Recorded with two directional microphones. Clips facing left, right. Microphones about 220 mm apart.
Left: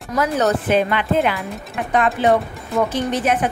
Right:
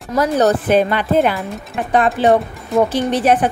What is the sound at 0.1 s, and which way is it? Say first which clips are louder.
Speech: right 4 dB; 35° right (ahead or behind).